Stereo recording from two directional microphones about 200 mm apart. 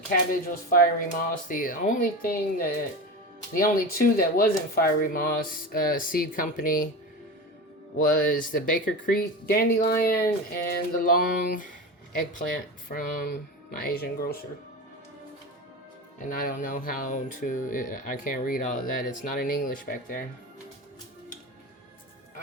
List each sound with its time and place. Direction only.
0.1 s speech: 45° left (ahead or behind)
7.9 s speech: 45° left (ahead or behind)
12.9 s speech: 45° left (ahead or behind)
16.3 s speech: 45° left (ahead or behind)